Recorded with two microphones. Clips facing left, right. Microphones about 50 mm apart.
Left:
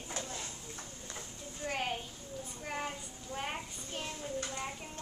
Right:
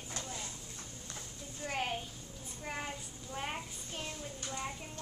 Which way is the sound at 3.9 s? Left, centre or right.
Left.